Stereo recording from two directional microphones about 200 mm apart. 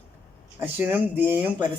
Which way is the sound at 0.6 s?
10° right (ahead or behind).